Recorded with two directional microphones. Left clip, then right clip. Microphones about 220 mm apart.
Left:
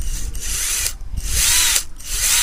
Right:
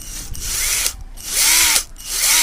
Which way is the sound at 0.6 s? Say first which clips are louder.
Right 3 dB; 15° right (ahead or behind).